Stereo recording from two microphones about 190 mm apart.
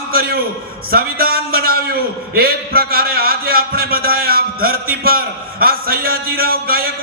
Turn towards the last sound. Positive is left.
turn(degrees=-50)  # may be behind; listen again after turning